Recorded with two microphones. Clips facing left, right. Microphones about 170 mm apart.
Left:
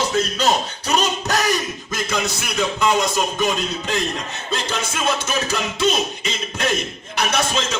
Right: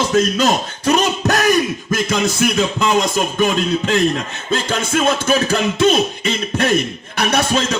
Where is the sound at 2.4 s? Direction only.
50° right (ahead or behind).